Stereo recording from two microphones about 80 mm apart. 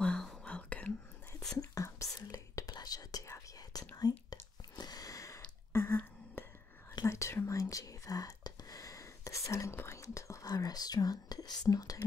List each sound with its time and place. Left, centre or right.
0.0 s whispering: centre
1.6 s whispering: left
5.7 s a sound: left
7.1 s whispering: left